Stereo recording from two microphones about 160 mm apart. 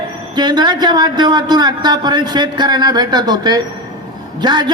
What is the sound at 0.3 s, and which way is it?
A man's voice, 25° right (ahead or behind).